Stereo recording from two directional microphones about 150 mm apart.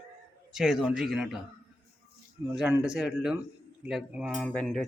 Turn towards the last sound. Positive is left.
turn(degrees=0)  # may be behind; listen again after turning